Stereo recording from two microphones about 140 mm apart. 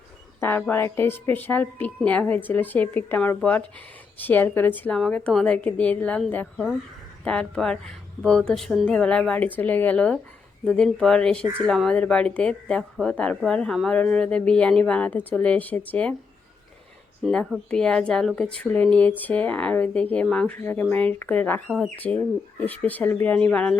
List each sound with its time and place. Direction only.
0.3 s a sound: 15° left (ahead or behind)
0.7 s a woman's voice: 15° left (ahead or behind)
17.2 s a woman's voice: 5° right (ahead or behind)